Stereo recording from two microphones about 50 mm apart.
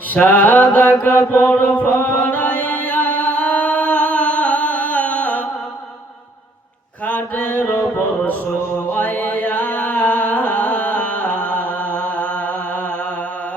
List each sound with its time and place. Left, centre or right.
0.1 s mantra: left
2.3 s music: left
7.0 s mantra: left
8.9 s music: left